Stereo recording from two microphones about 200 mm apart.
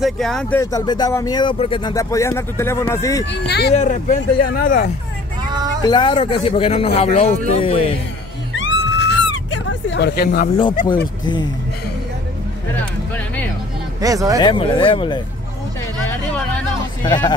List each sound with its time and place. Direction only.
0.0 s speech: centre (ahead or behind)
0.6 s speech: 15° left (ahead or behind)
3.3 s speech: 55° left (ahead or behind)
3.7 s speech: 35° left (ahead or behind)
5.9 s speech: 25° left (ahead or behind)
8.5 s a sound: 65° left (ahead or behind); by 10.5 s 50° left (ahead or behind)
14.0 s speech: 15° right (ahead or behind)
14.4 s speech: 25° left (ahead or behind)
16.1 s a sound: 5° left (ahead or behind)
17.0 s speech: 20° left (ahead or behind)